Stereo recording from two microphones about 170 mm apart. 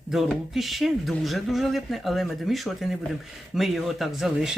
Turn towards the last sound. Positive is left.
turn(degrees=0)  # may be behind; listen again after turning